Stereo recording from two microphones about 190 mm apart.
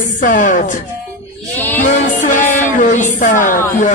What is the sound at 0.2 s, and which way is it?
Speech, 45° left (ahead or behind).